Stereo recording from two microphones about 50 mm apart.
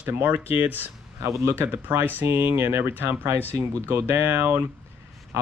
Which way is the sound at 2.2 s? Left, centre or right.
Right.